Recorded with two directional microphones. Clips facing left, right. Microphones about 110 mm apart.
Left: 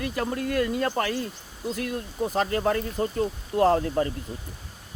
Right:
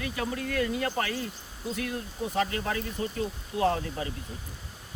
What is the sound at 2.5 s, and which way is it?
Speech, 45° left (ahead or behind).